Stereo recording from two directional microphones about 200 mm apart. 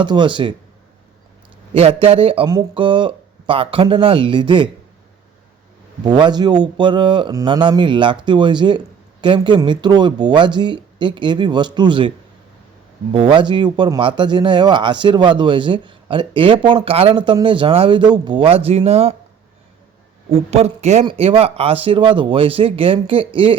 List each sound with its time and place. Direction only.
0.0 s speech: 25° right (ahead or behind)
1.7 s speech: 30° right (ahead or behind)
6.0 s speech: 20° right (ahead or behind)
13.1 s speech: 25° right (ahead or behind)
20.3 s speech: 30° right (ahead or behind)